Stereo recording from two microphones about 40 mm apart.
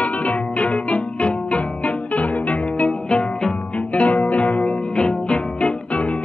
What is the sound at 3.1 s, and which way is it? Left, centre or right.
Music, left.